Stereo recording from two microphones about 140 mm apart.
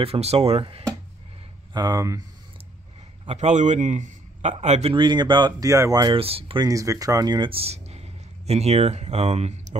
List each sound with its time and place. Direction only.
0.0 s speech: 45° right (ahead or behind)
1.7 s speech: 25° right (ahead or behind)
3.3 s a man's voice: 55° right (ahead or behind)
4.9 s speech: 35° right (ahead or behind)
6.1 s speech: 45° right (ahead or behind)
6.7 s speech: 25° right (ahead or behind); by 9.8 s 55° right (ahead or behind)